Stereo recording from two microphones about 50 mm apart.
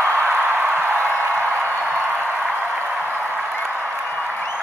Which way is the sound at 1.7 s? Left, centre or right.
Left.